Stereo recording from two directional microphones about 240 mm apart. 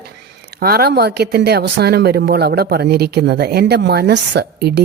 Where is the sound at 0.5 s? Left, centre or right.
Right.